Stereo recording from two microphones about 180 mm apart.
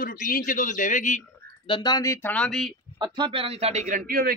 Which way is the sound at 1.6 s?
25° left (ahead or behind).